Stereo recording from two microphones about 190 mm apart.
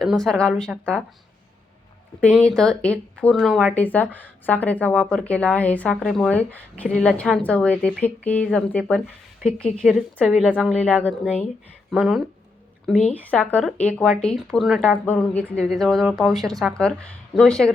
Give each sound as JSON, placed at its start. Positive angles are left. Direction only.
{"t": 0.0, "sound": "speech", "side_deg": 0}
{"t": 2.3, "sound": "speech", "side_deg": 5}